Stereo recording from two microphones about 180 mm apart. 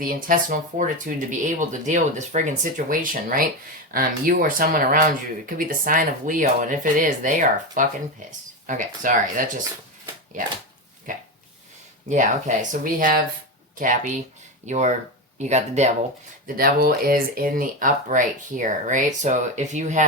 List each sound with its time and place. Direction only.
0.0 s speech: 50° right (ahead or behind)
12.0 s speech: 45° right (ahead or behind)
16.6 s speech: 55° right (ahead or behind)